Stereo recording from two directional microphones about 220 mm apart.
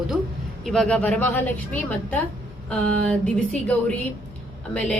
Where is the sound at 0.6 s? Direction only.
5° left (ahead or behind).